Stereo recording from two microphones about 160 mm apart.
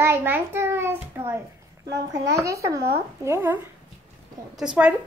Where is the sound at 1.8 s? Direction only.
90° right.